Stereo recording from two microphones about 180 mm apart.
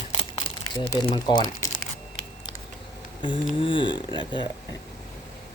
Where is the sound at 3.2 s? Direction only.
25° left (ahead or behind).